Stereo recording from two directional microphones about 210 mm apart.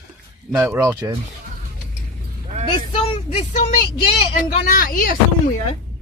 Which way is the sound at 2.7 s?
25° left (ahead or behind).